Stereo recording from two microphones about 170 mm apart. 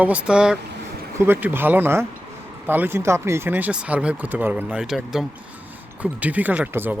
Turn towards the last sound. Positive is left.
turn(degrees=-10)  # may be behind; listen again after turning